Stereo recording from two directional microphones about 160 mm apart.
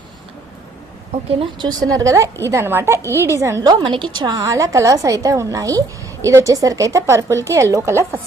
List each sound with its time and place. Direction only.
1.4 s a woman's voice: 25° right (ahead or behind)